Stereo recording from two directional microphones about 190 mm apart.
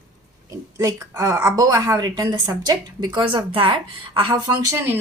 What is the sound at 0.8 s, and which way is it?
A woman's voice, 20° right (ahead or behind).